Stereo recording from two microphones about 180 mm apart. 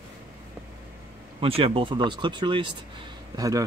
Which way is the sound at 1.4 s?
30° right (ahead or behind).